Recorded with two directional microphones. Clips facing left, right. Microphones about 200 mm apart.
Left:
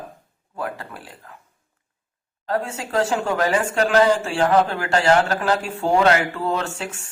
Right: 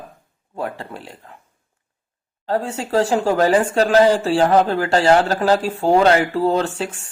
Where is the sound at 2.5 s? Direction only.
30° right (ahead or behind).